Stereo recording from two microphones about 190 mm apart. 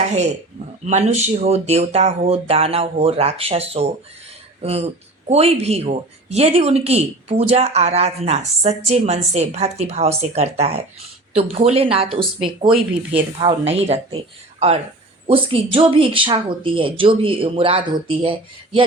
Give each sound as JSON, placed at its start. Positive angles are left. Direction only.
{"t": 0.0, "sound": "speech", "side_deg": -35}
{"t": 13.4, "sound": "speech", "side_deg": -30}